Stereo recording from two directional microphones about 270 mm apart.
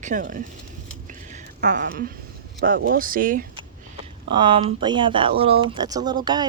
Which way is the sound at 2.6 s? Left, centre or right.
Right.